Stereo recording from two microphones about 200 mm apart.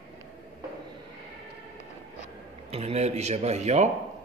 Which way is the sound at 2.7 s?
30° right (ahead or behind).